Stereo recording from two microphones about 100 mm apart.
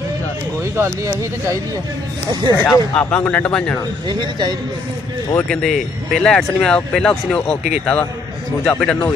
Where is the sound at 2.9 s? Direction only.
15° left (ahead or behind).